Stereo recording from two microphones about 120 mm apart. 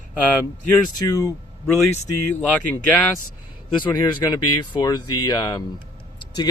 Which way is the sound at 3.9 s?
35° left (ahead or behind).